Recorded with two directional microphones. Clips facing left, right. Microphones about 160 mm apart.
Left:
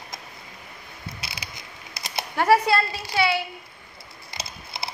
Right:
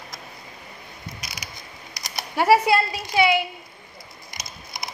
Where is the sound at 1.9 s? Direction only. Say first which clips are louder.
Left 3 dB; 25° left (ahead or behind).